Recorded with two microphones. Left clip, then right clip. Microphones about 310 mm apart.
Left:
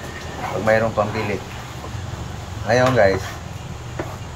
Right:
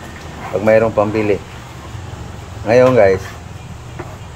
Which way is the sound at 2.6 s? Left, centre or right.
Right.